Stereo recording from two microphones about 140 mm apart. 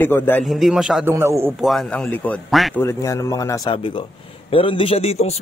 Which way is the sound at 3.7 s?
40° left (ahead or behind).